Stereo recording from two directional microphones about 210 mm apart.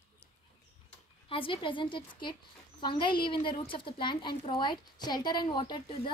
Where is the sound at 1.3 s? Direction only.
25° left (ahead or behind).